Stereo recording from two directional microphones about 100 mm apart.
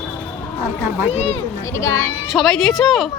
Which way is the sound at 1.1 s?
90° left.